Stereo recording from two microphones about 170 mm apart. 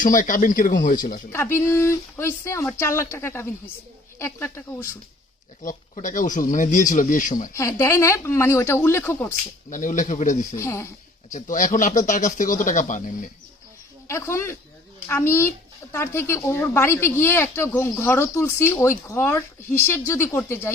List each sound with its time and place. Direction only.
0.0 s speech: 50° left (ahead or behind)
1.3 s speech: 15° left (ahead or behind)
5.9 s speech: 50° left (ahead or behind)
7.5 s speech: 15° left (ahead or behind)
9.6 s speech: 50° left (ahead or behind)
10.5 s speech: 15° left (ahead or behind)
11.3 s speech: 50° left (ahead or behind)
14.1 s speech: 15° left (ahead or behind)